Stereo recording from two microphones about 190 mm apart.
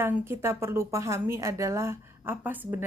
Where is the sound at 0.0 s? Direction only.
10° right (ahead or behind).